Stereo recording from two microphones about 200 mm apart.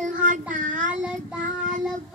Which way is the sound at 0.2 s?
40° right (ahead or behind).